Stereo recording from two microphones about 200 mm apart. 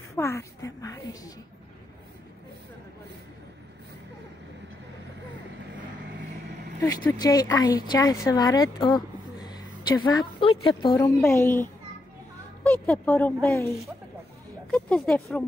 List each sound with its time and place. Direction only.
0.1 s a woman's voice: 15° left (ahead or behind)
6.8 s a woman's voice: 15° left (ahead or behind)